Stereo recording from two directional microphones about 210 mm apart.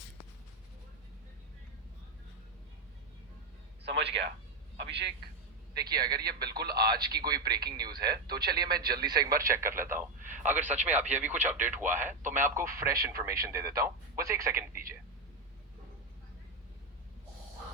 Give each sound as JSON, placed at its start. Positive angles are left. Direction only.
{"t": 3.8, "sound": "a sound", "side_deg": -55}
{"t": 4.8, "sound": "a man's voice", "side_deg": -55}
{"t": 5.7, "sound": "speech", "side_deg": -20}
{"t": 10.9, "sound": "speech", "side_deg": -35}
{"t": 11.2, "sound": "speech", "side_deg": -10}